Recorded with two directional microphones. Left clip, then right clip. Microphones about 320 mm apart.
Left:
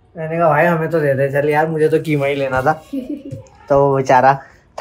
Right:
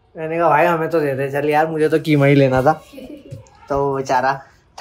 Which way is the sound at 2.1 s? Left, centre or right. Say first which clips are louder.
Right 3 dB; right.